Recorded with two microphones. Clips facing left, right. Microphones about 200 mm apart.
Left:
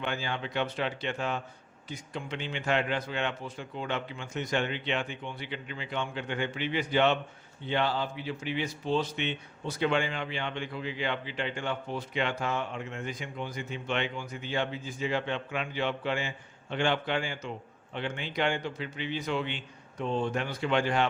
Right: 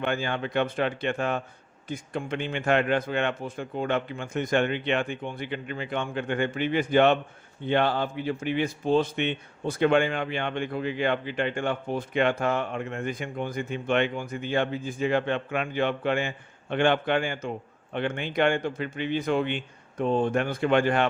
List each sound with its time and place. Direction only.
0.0 s speech: 55° right (ahead or behind)